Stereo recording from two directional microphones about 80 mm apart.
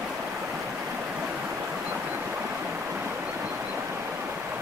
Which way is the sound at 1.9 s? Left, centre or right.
Right.